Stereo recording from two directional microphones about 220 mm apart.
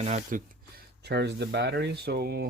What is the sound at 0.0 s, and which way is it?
Speech, 35° right (ahead or behind).